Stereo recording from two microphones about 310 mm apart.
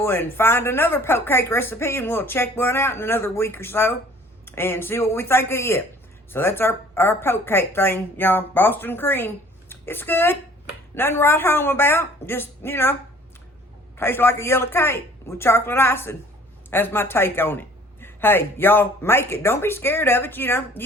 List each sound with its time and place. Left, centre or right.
0.0 s a woman's voice: centre